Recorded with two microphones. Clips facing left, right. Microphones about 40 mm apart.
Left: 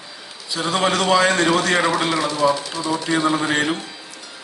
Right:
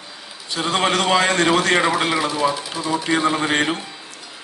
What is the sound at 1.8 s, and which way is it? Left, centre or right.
Speech, right.